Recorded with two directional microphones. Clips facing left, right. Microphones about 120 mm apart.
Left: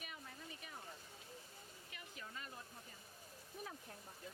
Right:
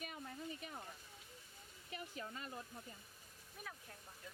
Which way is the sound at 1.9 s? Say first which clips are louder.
Right 7 dB; 35° right (ahead or behind).